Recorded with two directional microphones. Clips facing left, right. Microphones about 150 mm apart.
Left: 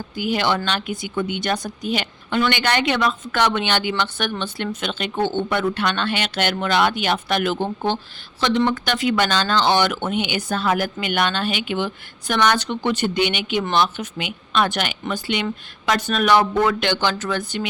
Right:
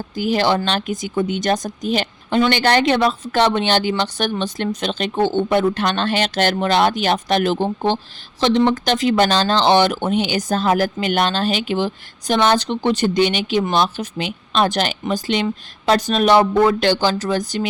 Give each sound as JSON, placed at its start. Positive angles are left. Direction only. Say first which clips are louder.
{"t": 0.2, "sound": "speech", "louder": "right 4 dB", "side_deg": -40}
{"t": 8.7, "sound": "speech", "louder": "right 4 dB", "side_deg": -40}